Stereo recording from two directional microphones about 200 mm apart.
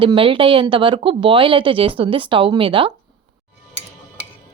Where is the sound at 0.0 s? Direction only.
25° right (ahead or behind).